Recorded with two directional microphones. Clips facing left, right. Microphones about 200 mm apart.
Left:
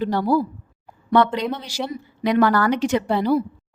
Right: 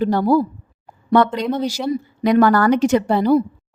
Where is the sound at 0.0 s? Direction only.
45° right (ahead or behind).